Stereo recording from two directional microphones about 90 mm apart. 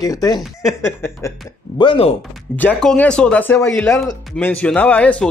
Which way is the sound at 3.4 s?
20° left (ahead or behind).